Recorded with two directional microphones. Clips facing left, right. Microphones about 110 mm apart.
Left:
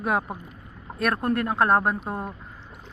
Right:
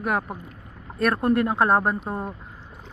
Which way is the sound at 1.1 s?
5° right (ahead or behind).